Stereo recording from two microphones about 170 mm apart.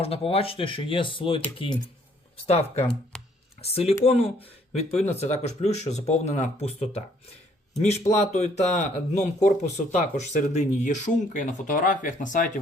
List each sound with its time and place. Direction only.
0.0 s speech: 35° left (ahead or behind); by 12.5 s 50° left (ahead or behind)